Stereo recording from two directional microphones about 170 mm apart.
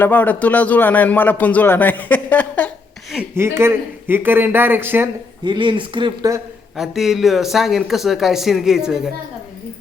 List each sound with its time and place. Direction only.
0.0 s a man's voice: 10° left (ahead or behind)
3.2 s speech: 15° right (ahead or behind)
5.5 s speech: 30° right (ahead or behind)
6.7 s speech: centre (ahead or behind)